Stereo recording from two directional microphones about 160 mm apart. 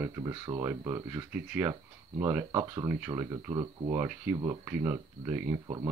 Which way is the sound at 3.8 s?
10° right (ahead or behind).